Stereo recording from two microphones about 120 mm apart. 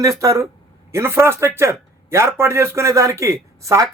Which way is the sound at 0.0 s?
25° right (ahead or behind).